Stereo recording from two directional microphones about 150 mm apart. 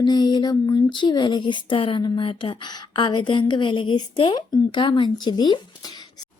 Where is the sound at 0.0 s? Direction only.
30° left (ahead or behind).